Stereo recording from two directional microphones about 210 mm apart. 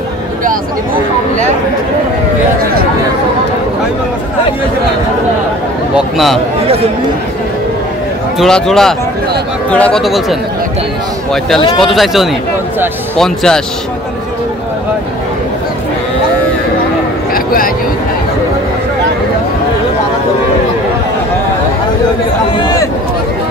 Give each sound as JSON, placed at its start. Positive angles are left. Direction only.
{"t": 5.9, "sound": "speech", "side_deg": 0}
{"t": 8.4, "sound": "speech", "side_deg": 0}
{"t": 11.8, "sound": "speech", "side_deg": 0}
{"t": 17.3, "sound": "a sound", "side_deg": 45}